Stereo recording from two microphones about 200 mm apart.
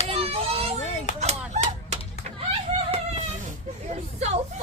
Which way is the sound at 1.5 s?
35° right (ahead or behind).